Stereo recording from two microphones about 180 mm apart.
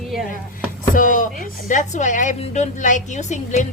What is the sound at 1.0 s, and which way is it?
Speech, 45° left (ahead or behind).